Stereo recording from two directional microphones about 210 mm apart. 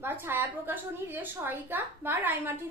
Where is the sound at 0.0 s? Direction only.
10° right (ahead or behind).